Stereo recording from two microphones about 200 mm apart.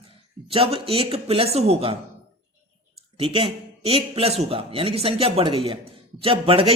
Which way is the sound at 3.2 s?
25° right (ahead or behind).